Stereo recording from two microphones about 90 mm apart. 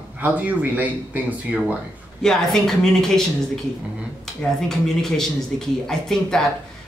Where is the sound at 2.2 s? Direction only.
5° left (ahead or behind).